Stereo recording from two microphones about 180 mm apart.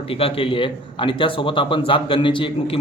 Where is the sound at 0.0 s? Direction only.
30° left (ahead or behind).